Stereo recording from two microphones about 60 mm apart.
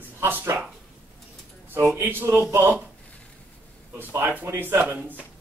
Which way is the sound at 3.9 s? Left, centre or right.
Right.